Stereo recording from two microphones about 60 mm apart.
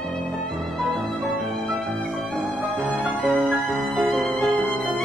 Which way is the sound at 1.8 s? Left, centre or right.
Left.